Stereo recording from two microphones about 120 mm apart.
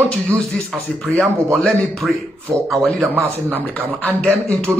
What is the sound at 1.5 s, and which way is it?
Speech, centre (ahead or behind).